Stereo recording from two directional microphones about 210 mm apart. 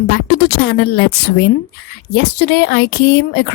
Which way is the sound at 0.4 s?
50° left (ahead or behind).